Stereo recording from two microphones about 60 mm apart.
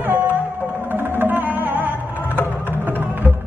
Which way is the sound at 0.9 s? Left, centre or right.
Right.